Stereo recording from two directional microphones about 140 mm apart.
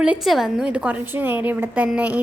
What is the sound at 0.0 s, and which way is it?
Speech, 5° right (ahead or behind).